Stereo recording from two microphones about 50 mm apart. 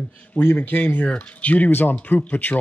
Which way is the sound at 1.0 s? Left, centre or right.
Left.